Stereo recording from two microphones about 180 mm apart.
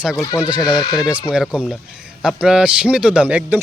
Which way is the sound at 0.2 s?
20° left (ahead or behind).